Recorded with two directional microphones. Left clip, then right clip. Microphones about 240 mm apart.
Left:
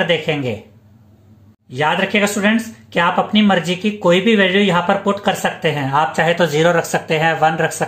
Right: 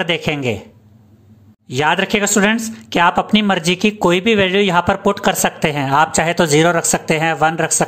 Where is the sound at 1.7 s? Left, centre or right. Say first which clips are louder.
Right 1 dB; right.